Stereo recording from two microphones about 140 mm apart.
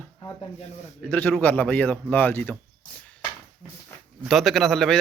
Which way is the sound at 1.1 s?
10° left (ahead or behind).